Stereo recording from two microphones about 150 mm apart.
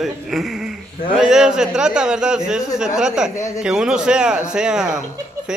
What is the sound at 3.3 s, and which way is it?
Speech, 20° left (ahead or behind).